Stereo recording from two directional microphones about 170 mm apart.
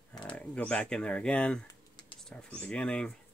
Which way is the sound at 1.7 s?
25° left (ahead or behind).